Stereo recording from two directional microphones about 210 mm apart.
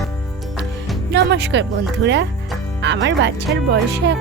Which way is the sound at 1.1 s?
55° right (ahead or behind).